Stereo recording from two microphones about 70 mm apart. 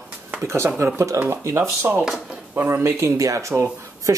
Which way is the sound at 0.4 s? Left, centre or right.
Right.